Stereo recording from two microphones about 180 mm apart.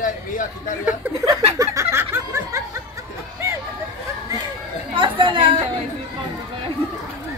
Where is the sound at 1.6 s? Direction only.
15° right (ahead or behind).